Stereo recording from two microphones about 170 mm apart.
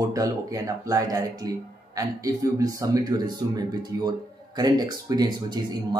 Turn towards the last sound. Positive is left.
turn(degrees=-25)  # may be behind; listen again after turning